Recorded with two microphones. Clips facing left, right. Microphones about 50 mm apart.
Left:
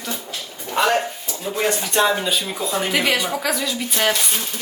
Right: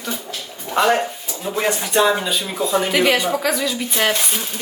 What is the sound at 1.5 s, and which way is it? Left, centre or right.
A man's voice, centre.